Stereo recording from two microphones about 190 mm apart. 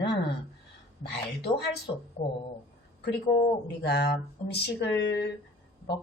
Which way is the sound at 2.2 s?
30° left (ahead or behind).